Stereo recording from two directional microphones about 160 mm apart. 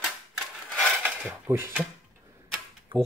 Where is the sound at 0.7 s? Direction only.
10° right (ahead or behind).